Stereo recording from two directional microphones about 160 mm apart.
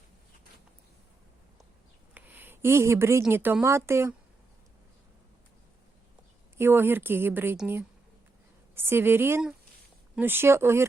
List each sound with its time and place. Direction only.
2.1 s speech: 10° right (ahead or behind)
6.6 s speech: 15° right (ahead or behind)
8.7 s speech: 15° right (ahead or behind)